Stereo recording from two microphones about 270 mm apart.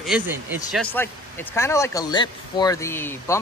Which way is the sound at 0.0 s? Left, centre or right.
Centre.